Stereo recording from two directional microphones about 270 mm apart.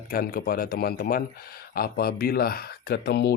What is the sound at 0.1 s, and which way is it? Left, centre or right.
Speech, left.